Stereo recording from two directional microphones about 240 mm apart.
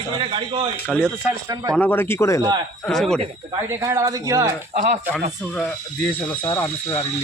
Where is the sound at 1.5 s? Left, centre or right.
Centre.